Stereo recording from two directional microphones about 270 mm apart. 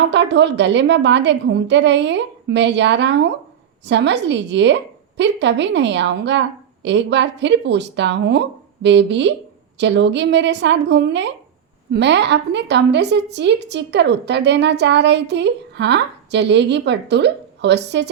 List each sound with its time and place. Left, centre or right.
0.1 s a woman's voice: right